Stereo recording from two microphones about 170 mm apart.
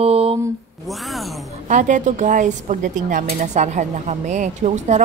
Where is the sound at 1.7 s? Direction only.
45° right (ahead or behind).